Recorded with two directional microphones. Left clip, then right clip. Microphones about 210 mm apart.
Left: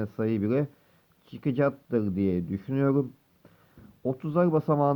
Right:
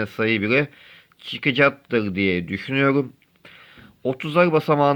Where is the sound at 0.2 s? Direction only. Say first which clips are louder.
Right 8 dB; 20° right (ahead or behind).